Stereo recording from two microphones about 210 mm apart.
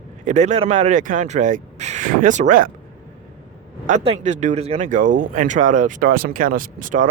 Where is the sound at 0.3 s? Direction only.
35° right (ahead or behind).